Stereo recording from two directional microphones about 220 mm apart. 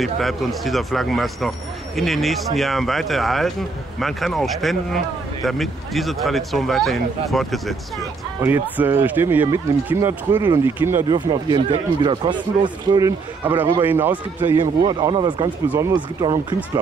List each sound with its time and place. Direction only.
0.0 s speech: centre (ahead or behind)
8.4 s speech: 10° right (ahead or behind)
13.4 s speech: 10° right (ahead or behind)
14.8 s speech: 20° right (ahead or behind)